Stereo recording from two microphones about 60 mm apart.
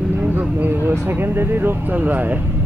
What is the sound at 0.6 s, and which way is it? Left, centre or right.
Speech, right.